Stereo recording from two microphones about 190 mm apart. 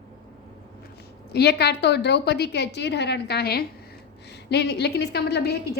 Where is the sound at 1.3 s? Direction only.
60° left (ahead or behind).